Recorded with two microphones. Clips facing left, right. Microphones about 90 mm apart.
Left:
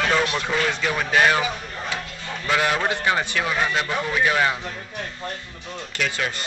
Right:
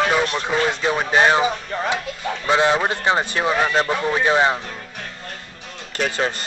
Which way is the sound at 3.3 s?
35° right (ahead or behind).